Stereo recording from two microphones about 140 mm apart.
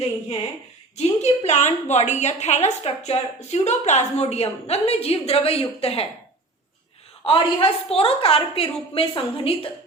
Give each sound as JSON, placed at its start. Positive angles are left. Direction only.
{"t": 0.9, "sound": "a woman's voice", "side_deg": 55}
{"t": 7.3, "sound": "a woman's voice", "side_deg": 40}